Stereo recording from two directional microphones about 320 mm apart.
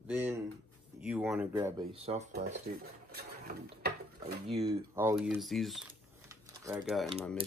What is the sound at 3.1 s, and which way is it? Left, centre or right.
Mechanisms, right.